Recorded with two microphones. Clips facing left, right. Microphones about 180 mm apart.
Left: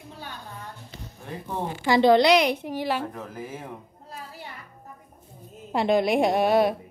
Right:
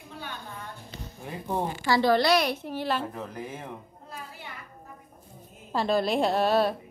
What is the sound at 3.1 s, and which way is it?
Speech, centre (ahead or behind).